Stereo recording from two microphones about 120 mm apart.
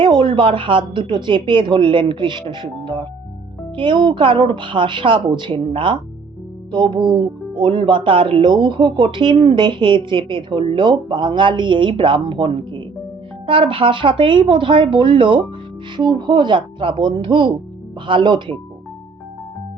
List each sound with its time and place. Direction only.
0.0 s speech: 45° right (ahead or behind)